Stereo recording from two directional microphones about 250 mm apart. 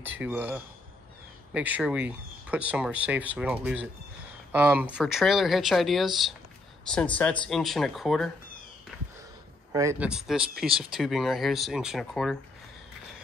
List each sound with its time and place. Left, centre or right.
0.0 s speech: centre
9.7 s speech: centre